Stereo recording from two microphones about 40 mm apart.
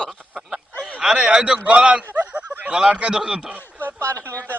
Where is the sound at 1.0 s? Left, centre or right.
Right.